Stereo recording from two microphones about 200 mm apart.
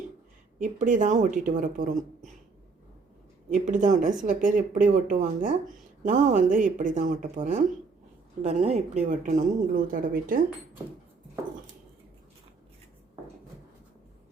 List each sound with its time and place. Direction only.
0.6 s speech: 40° right (ahead or behind)
3.5 s speech: 40° right (ahead or behind)